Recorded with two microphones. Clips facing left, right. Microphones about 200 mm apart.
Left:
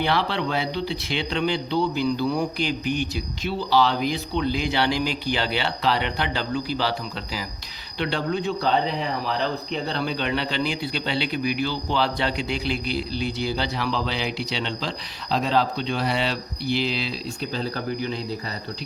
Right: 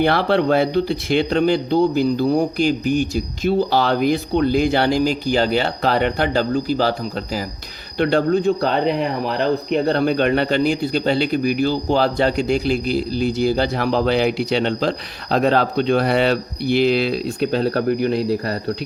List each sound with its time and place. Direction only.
0.0 s a man's voice: 50° right (ahead or behind)
7.9 s a man's voice: 50° right (ahead or behind); by 18.5 s 65° right (ahead or behind)